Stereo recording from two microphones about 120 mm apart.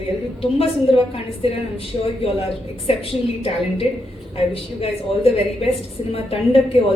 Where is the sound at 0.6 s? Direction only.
55° left (ahead or behind).